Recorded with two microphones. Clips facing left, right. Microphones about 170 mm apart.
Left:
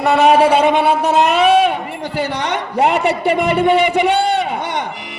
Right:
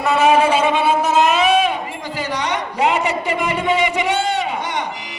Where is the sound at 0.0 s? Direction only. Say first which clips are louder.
Left 3 dB; 65° left (ahead or behind).